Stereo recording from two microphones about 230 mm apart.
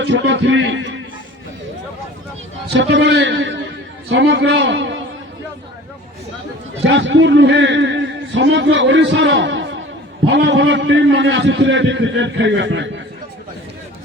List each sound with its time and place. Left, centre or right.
0.0 s a man's voice: right
2.6 s a man's voice: right
6.8 s a man's voice: right